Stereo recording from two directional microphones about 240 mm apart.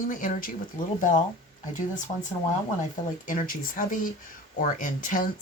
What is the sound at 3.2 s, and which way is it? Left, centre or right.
Speech, left.